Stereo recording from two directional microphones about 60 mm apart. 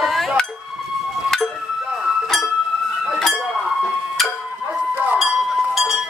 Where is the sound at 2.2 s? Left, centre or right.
Centre.